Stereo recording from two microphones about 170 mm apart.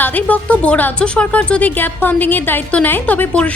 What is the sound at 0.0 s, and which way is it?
A woman's voice, 10° left (ahead or behind).